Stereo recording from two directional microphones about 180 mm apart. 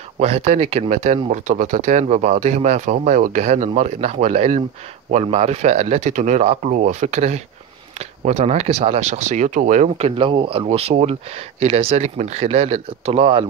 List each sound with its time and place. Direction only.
0.2 s speech: 40° right (ahead or behind)